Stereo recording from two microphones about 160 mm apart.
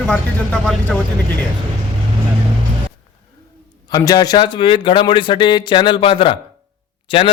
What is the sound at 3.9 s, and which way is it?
Speech, 25° left (ahead or behind).